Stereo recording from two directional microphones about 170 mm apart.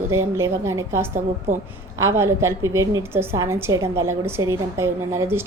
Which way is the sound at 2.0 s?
15° right (ahead or behind).